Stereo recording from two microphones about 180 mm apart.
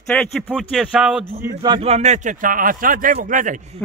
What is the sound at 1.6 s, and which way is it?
A man's voice, 30° right (ahead or behind).